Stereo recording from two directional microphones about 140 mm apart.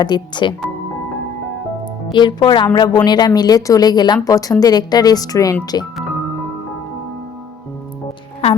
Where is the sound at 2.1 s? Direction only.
35° left (ahead or behind).